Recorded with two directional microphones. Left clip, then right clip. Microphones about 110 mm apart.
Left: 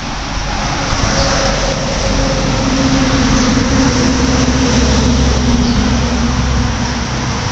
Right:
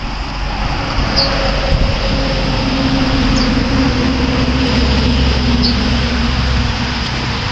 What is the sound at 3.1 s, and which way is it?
Vehicle, 30° left (ahead or behind).